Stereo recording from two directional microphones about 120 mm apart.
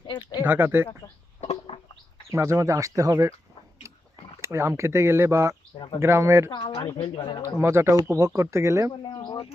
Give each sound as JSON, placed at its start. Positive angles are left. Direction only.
{"t": 0.0, "sound": "speech", "side_deg": 40}
{"t": 0.4, "sound": "speech", "side_deg": -15}
{"t": 1.4, "sound": "a sound", "side_deg": 55}
{"t": 2.3, "sound": "speech", "side_deg": -25}
{"t": 4.4, "sound": "speech", "side_deg": -25}
{"t": 6.5, "sound": "a woman's voice", "side_deg": 45}
{"t": 7.6, "sound": "speech", "side_deg": -20}
{"t": 8.9, "sound": "a woman's voice", "side_deg": 40}